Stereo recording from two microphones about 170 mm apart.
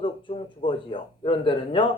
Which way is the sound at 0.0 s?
30° left (ahead or behind).